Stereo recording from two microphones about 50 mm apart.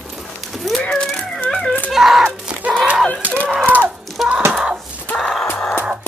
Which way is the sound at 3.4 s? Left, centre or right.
Right.